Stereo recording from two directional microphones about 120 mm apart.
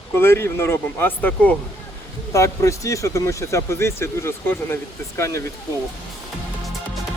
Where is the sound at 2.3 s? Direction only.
25° left (ahead or behind).